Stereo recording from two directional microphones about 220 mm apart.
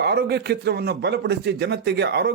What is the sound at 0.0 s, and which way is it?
Speech, 50° right (ahead or behind).